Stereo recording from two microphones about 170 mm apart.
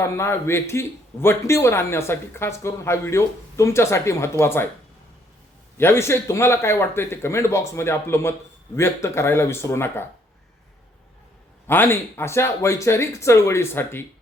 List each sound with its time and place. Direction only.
0.0 s a man's voice: 15° left (ahead or behind)
5.7 s a man's voice: 15° left (ahead or behind)
11.7 s a man's voice: 15° left (ahead or behind)